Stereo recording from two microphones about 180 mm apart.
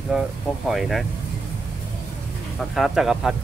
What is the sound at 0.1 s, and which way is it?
Speech, 5° right (ahead or behind).